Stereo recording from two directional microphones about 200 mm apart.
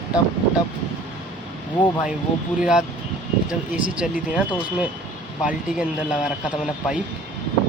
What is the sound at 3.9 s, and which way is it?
Speech, 5° right (ahead or behind).